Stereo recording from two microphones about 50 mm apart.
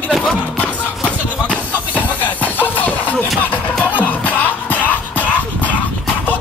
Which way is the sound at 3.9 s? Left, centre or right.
Left.